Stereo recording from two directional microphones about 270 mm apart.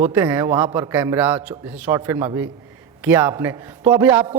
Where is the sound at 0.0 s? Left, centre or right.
Centre.